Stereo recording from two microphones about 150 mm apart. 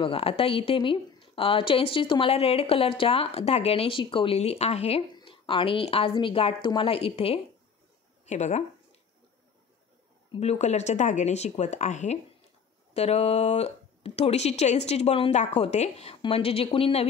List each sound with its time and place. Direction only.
0.0 s a woman's voice: 40° left (ahead or behind)
10.3 s speech: 45° left (ahead or behind)